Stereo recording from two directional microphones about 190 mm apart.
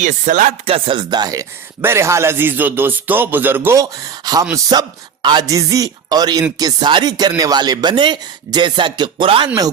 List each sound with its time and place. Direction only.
0.0 s chopping: 40° right (ahead or behind)
0.7 s speech: 25° right (ahead or behind)